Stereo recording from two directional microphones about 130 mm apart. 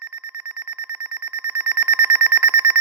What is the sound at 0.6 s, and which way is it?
Alarm clock, 15° right (ahead or behind).